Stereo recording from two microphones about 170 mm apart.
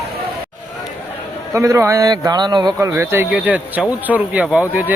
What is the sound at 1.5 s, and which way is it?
A man's voice, 15° right (ahead or behind).